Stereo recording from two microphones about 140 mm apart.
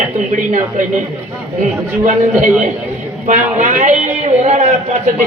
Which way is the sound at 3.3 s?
60° right (ahead or behind).